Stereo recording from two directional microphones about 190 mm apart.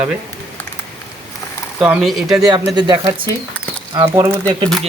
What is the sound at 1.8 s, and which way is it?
Speech, centre (ahead or behind).